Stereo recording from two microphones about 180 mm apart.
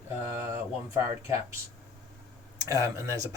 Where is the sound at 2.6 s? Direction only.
20° right (ahead or behind).